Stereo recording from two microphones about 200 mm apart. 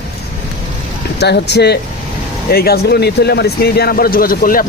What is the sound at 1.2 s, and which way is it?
Speech, 55° left (ahead or behind).